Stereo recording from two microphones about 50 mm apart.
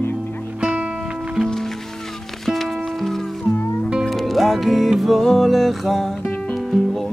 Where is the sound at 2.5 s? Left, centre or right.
Centre.